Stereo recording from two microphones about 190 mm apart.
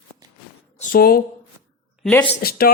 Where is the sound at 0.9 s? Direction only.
55° left (ahead or behind).